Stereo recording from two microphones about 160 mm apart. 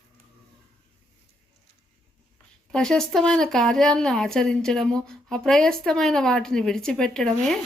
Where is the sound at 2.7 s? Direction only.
5° left (ahead or behind).